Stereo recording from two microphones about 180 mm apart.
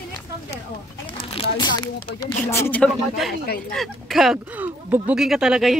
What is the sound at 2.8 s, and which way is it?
Speech, centre (ahead or behind).